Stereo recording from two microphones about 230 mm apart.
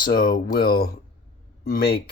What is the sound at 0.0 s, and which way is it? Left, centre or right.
Speech, left.